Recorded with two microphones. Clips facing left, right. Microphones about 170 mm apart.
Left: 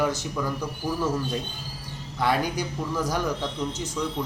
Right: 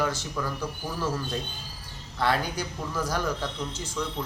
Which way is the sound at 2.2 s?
15° left (ahead or behind).